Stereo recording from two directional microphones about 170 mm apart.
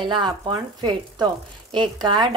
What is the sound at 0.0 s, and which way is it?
Speech, 25° right (ahead or behind).